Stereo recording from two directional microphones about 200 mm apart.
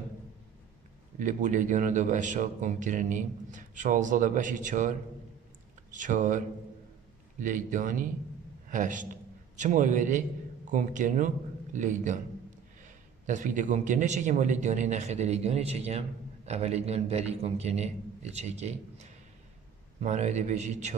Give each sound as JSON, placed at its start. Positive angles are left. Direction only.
{"t": 1.2, "sound": "a man's voice", "side_deg": -40}